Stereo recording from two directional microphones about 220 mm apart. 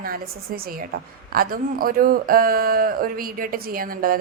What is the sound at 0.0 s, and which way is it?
Speech, 40° right (ahead or behind).